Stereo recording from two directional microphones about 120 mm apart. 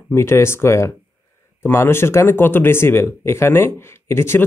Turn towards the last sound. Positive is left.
turn(degrees=20)  # may be behind; listen again after turning